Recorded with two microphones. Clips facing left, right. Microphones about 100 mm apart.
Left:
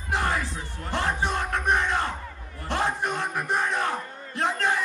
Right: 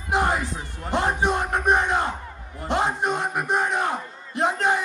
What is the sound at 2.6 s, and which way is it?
A man's voice, 20° right (ahead or behind).